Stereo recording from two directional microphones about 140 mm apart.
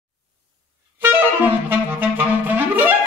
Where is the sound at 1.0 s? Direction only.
15° right (ahead or behind).